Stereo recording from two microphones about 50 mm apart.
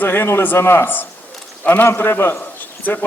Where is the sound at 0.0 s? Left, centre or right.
Left.